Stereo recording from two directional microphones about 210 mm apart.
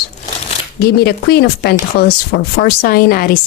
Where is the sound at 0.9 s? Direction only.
50° left (ahead or behind).